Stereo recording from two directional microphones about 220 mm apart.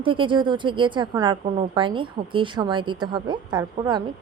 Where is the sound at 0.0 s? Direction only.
25° right (ahead or behind).